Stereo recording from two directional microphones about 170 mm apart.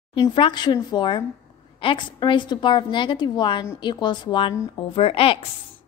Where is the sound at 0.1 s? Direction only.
30° left (ahead or behind).